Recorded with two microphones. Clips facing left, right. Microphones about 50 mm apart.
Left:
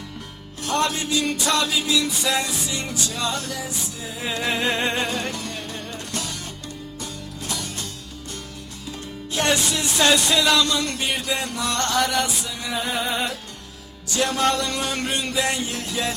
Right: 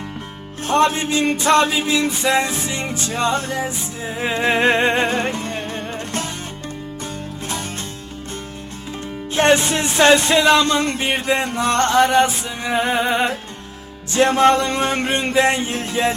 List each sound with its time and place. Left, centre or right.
0.6 s music: right
7.4 s music: right
9.3 s music: right